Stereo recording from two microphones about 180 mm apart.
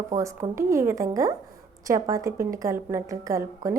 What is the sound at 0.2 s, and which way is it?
A woman's voice, 15° right (ahead or behind).